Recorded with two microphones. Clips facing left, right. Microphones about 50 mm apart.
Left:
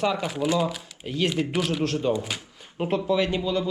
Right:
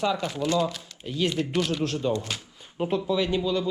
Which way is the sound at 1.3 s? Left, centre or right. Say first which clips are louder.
Left 1 dB; centre.